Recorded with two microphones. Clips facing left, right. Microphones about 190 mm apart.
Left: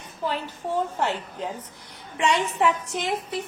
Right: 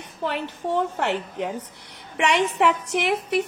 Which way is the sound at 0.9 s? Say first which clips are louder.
Right 2 dB; 75° right (ahead or behind).